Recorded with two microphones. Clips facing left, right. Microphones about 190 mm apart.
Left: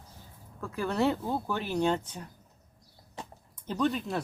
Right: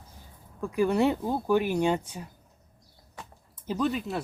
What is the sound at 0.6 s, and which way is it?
Speech, 15° right (ahead or behind).